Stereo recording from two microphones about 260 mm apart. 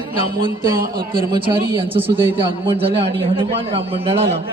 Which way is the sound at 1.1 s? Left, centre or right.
Centre.